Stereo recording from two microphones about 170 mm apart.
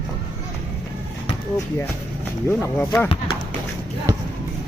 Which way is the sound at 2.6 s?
10° left (ahead or behind).